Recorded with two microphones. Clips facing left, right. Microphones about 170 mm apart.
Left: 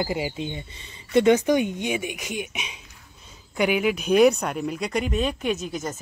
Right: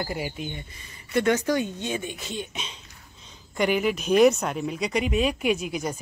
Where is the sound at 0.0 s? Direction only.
20° left (ahead or behind).